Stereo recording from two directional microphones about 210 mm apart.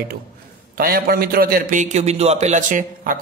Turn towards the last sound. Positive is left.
turn(degrees=-40)  # may be behind; listen again after turning